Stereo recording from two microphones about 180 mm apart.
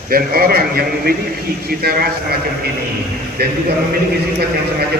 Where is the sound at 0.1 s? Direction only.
55° right (ahead or behind).